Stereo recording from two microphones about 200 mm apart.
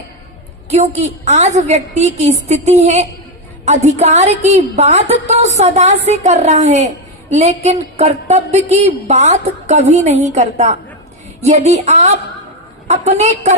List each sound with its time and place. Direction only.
0.7 s a woman's voice: 35° right (ahead or behind)